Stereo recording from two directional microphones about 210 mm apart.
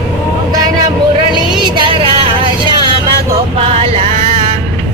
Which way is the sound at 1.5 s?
25° right (ahead or behind).